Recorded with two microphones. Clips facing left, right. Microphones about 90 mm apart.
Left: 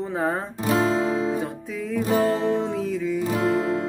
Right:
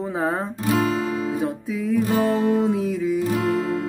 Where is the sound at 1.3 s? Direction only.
Centre (ahead or behind).